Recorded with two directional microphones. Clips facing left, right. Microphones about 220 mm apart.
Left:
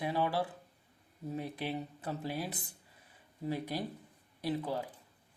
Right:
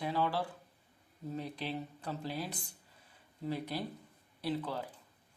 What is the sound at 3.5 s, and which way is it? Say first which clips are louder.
Speech: left 1 dB; 15° left (ahead or behind).